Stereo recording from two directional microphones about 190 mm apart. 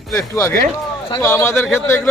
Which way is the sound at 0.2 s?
15° left (ahead or behind).